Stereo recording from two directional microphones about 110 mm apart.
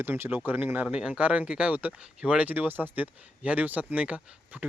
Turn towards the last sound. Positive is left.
turn(degrees=-10)  # may be behind; listen again after turning